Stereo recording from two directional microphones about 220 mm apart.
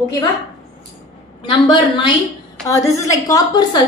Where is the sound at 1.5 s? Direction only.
20° left (ahead or behind).